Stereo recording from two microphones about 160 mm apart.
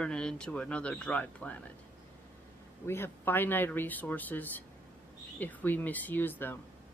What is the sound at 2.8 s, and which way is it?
A woman's voice, 15° left (ahead or behind).